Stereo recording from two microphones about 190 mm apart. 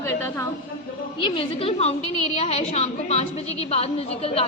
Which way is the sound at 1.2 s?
30° left (ahead or behind).